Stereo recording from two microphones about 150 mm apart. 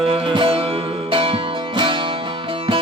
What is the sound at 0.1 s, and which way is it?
Music, 35° right (ahead or behind).